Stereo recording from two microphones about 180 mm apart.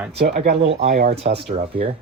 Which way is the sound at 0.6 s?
35° right (ahead or behind).